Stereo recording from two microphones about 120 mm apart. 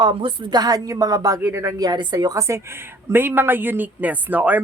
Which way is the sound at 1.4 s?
20° right (ahead or behind).